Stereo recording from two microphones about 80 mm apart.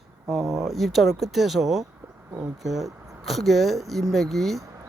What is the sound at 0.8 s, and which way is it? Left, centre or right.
Speech, centre.